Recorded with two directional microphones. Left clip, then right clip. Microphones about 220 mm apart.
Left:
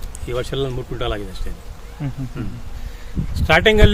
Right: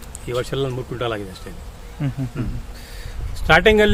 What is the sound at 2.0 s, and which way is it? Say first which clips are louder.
Speech: right 2 dB; 45° right (ahead or behind).